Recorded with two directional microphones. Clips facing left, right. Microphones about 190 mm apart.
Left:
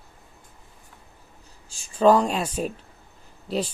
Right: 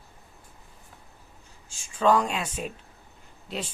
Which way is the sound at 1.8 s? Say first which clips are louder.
Left 5 dB; 35° left (ahead or behind).